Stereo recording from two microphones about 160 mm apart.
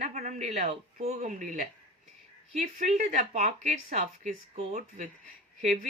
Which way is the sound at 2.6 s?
45° right (ahead or behind).